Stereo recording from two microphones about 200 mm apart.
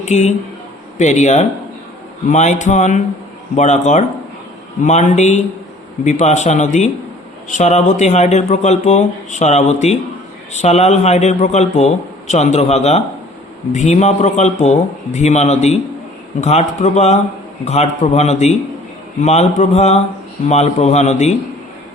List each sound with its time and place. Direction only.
0.0 s speech: 35° left (ahead or behind)